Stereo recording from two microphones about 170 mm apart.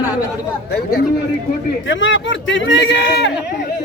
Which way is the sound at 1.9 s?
90° left.